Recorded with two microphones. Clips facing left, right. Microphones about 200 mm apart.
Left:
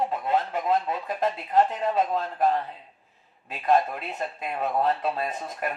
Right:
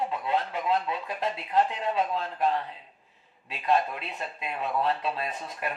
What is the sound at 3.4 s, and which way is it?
Speech, 45° left (ahead or behind).